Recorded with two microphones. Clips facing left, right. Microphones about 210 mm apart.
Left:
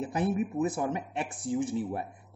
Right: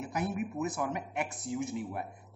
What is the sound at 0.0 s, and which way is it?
Speech, 30° left (ahead or behind).